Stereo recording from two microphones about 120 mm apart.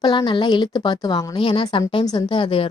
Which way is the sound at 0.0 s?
40° left (ahead or behind).